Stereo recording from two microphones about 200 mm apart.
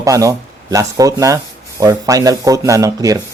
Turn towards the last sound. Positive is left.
turn(degrees=-15)  # may be behind; listen again after turning